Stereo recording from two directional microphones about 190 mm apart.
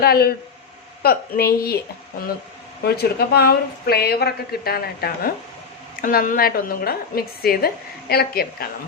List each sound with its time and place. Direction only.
0.0 s a woman's voice: 55° left (ahead or behind)
2.8 s a woman's voice: 55° left (ahead or behind)